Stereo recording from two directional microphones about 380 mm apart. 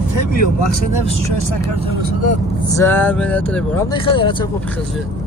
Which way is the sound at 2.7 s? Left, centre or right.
Centre.